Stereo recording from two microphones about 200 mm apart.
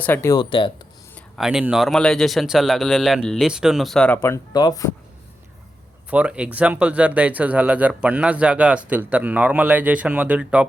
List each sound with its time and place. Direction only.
0.0 s speech: 10° left (ahead or behind)
1.1 s speech: centre (ahead or behind); by 4.9 s 20° left (ahead or behind)
6.1 s speech: 5° right (ahead or behind)